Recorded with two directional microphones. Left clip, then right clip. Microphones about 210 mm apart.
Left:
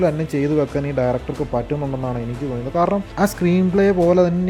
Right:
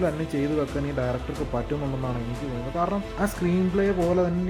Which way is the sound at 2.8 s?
45° left (ahead or behind).